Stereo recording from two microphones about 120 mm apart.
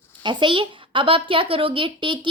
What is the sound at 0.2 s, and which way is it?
Speech, 40° right (ahead or behind).